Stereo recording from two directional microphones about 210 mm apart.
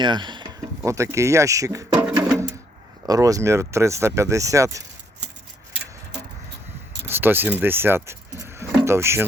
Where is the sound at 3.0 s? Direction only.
15° right (ahead or behind).